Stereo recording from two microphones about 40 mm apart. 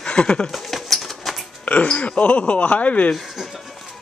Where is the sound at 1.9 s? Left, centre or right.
Left.